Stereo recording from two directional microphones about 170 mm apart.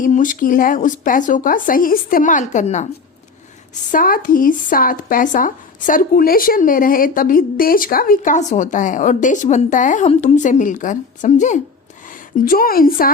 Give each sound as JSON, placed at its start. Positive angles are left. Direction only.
{"t": 0.0, "sound": "speech", "side_deg": 50}
{"t": 3.9, "sound": "speech", "side_deg": 55}
{"t": 12.5, "sound": "a woman's voice", "side_deg": 60}